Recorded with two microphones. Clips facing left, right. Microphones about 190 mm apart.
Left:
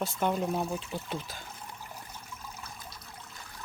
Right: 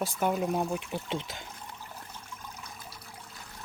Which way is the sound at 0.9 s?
20° right (ahead or behind).